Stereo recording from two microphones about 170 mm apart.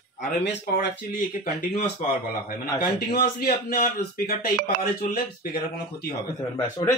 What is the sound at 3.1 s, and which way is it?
A man's voice, 65° left (ahead or behind).